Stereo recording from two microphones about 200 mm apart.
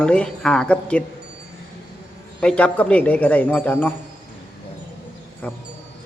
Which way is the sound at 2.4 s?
5° left (ahead or behind).